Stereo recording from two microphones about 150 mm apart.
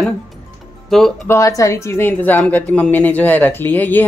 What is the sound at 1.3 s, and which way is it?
A woman's voice, 20° left (ahead or behind).